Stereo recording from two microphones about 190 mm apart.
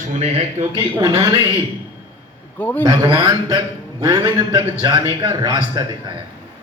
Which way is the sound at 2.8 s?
20° right (ahead or behind).